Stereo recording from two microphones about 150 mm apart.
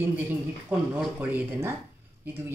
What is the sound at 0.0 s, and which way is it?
Speech, 10° right (ahead or behind).